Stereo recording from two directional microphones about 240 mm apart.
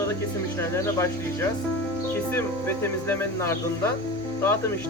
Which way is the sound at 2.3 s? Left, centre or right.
Centre.